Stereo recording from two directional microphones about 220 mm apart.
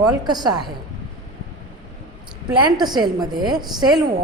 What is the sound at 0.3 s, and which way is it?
Speech, 20° right (ahead or behind).